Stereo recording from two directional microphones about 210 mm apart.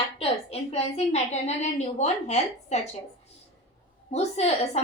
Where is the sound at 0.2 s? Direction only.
30° left (ahead or behind).